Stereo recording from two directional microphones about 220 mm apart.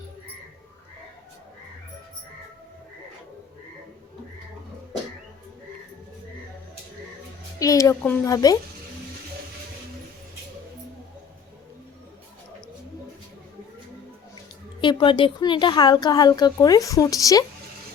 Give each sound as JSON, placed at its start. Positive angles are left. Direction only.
{"t": 7.6, "sound": "a woman's voice", "side_deg": 15}
{"t": 14.8, "sound": "speech", "side_deg": 20}